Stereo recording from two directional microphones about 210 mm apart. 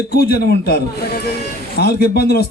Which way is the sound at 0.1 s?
50° left (ahead or behind).